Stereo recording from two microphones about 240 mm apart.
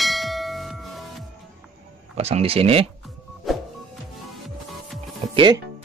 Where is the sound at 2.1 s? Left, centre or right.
Right.